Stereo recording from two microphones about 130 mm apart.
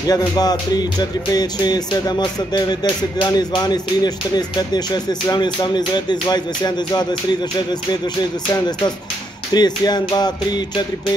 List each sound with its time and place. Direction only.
0.1 s music: 30° left (ahead or behind)
9.5 s music: 35° left (ahead or behind)